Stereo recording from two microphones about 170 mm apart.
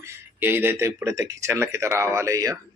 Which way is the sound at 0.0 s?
10° right (ahead or behind).